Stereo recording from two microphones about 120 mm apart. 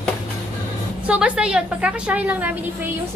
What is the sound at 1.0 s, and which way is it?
A woman's voice, 10° right (ahead or behind).